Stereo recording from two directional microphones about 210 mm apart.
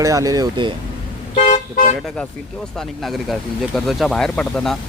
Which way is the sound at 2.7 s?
Centre (ahead or behind).